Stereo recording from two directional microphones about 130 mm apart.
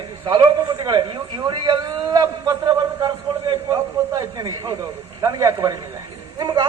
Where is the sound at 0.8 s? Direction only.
35° right (ahead or behind).